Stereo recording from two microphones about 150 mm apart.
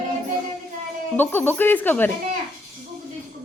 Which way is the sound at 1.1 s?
15° left (ahead or behind).